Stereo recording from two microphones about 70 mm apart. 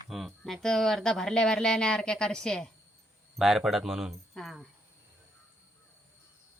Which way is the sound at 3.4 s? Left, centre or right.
Centre.